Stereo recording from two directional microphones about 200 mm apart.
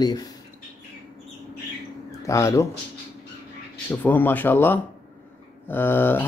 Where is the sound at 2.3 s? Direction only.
15° left (ahead or behind).